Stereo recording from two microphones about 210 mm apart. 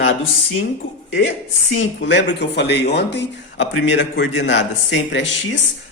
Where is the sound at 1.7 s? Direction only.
60° left (ahead or behind).